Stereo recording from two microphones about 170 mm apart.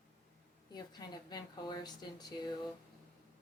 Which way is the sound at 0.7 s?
25° left (ahead or behind).